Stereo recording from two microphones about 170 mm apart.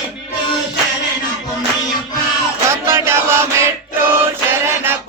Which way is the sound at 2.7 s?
15° right (ahead or behind).